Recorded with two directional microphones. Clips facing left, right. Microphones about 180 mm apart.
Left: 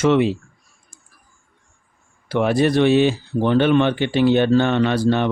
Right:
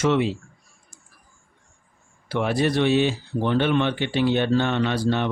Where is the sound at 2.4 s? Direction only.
50° left (ahead or behind).